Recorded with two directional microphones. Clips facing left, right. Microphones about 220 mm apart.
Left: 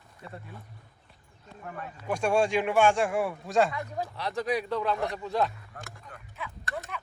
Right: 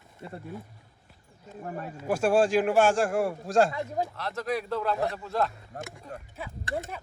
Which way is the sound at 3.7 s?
30° right (ahead or behind).